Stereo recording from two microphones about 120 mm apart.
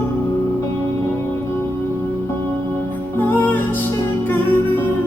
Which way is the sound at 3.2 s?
15° left (ahead or behind).